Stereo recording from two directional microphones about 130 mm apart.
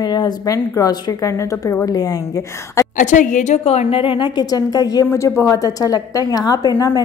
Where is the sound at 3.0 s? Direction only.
75° left (ahead or behind).